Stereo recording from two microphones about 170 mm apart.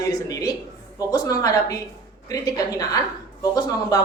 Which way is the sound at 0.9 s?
20° left (ahead or behind).